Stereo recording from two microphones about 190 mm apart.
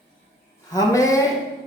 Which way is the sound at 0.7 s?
20° left (ahead or behind).